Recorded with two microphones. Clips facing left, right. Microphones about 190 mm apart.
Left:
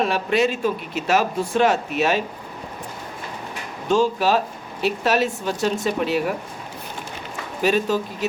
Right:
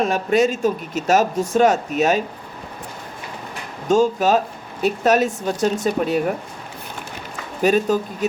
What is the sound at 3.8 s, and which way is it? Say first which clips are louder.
Speech: right 3 dB; 45° right (ahead or behind).